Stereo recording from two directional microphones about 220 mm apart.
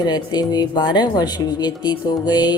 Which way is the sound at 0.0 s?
20° left (ahead or behind).